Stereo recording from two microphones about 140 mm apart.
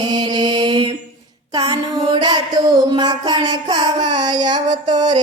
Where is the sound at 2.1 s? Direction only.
30° right (ahead or behind).